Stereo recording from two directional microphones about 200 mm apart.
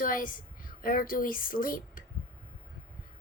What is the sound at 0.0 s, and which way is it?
Speech, 45° left (ahead or behind).